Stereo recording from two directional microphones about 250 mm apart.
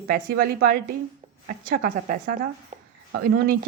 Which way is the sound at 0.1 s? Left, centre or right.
Right.